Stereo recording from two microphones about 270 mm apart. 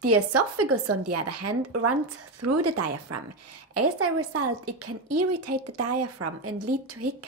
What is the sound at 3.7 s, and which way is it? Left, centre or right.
Speech, right.